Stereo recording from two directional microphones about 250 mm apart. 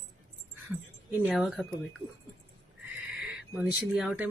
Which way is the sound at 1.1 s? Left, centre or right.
Centre.